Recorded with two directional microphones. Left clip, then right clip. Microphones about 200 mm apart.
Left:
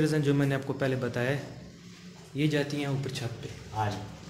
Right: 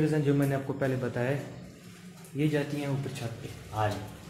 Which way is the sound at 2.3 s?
5° left (ahead or behind).